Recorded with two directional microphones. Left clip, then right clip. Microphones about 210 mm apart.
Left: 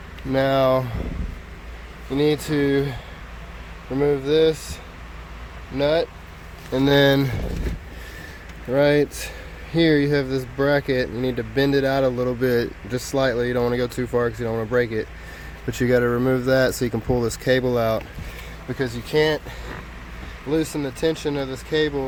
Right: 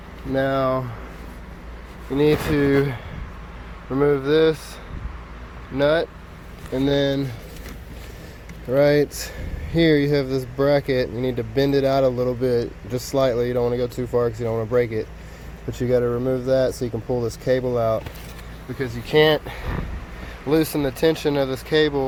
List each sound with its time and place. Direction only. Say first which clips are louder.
0.3 s speech: left 3 dB; 25° left (ahead or behind)
2.1 s speech: right 2 dB; 10° left (ahead or behind)
5.7 s speech: right 1 dB; 10° left (ahead or behind)
6.7 s speech: left 4 dB; 30° left (ahead or behind)
8.7 s speech: right 1 dB; 5° left (ahead or behind); by 18.0 s 30° left (ahead or behind)
19.0 s speech: right 4 dB; 5° right (ahead or behind)